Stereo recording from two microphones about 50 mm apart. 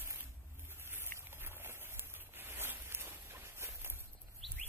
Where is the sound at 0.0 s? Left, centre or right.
Right.